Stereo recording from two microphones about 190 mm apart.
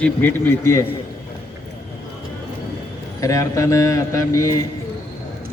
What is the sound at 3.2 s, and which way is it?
A man's voice, 15° left (ahead or behind).